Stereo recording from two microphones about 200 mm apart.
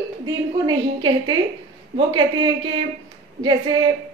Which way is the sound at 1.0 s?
25° right (ahead or behind).